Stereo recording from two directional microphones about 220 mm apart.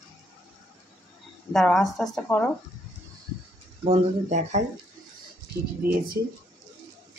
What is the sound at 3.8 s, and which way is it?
Speech, 30° right (ahead or behind).